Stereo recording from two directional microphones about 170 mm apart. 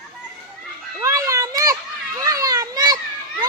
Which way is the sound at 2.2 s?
20° right (ahead or behind).